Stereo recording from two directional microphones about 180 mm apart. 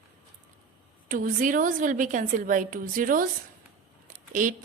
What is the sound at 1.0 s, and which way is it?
A woman's voice, 50° right (ahead or behind).